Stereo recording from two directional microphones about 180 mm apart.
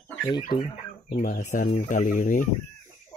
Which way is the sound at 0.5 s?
30° left (ahead or behind).